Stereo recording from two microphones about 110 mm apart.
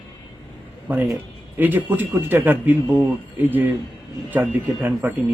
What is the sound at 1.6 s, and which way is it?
Speech, 15° right (ahead or behind).